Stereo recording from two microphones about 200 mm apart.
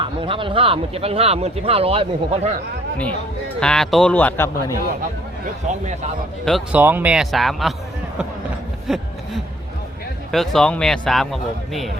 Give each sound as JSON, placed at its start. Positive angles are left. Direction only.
{"t": 0.0, "sound": "speech", "side_deg": -25}
{"t": 3.6, "sound": "speech", "side_deg": 5}
{"t": 5.8, "sound": "speech", "side_deg": -35}
{"t": 6.4, "sound": "a man's voice", "side_deg": 0}
{"t": 6.7, "sound": "a man's voice", "side_deg": -10}
{"t": 8.9, "sound": "a man's voice", "side_deg": 0}
{"t": 10.3, "sound": "a man's voice", "side_deg": 0}